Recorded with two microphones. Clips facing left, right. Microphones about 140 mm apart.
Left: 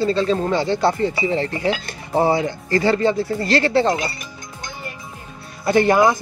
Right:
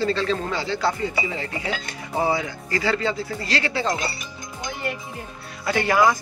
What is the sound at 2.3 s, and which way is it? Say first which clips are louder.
Speech: left 7 dB; 30° left (ahead or behind).